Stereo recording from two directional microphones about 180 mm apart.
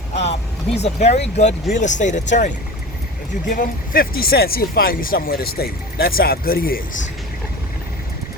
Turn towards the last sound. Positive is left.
turn(degrees=50)  # may be behind; listen again after turning